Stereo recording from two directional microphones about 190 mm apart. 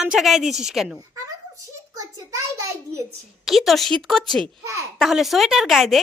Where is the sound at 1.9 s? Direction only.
15° right (ahead or behind).